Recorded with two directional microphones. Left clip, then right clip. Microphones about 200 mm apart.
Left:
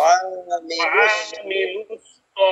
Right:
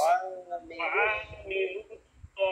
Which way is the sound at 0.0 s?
50° left (ahead or behind).